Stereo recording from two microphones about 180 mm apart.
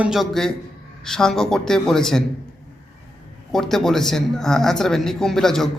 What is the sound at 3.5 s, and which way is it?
A woman's voice, centre (ahead or behind).